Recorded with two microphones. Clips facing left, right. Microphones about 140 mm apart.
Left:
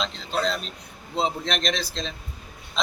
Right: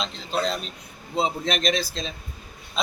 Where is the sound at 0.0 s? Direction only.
Centre (ahead or behind).